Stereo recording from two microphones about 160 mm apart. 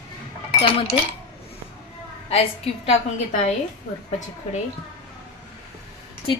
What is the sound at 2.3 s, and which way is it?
Speech, 40° left (ahead or behind).